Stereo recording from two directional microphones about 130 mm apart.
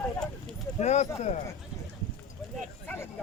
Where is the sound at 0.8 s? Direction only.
60° left (ahead or behind).